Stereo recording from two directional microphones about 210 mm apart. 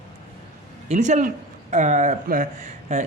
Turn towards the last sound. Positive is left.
turn(degrees=-35)  # may be behind; listen again after turning